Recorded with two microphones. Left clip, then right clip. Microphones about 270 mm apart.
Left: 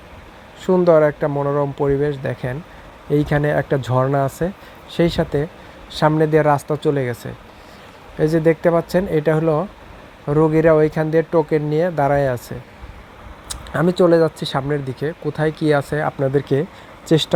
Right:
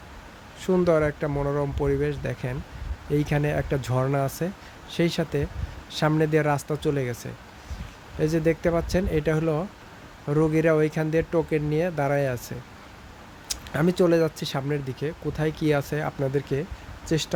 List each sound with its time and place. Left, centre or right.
0.6 s speech: centre
13.5 s a sound: centre
14.0 s speech: centre